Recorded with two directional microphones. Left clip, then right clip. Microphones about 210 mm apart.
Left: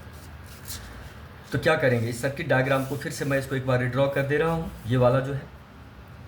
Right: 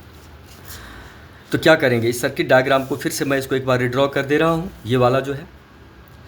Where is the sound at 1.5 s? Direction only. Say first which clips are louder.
Right 8 dB; 50° right (ahead or behind).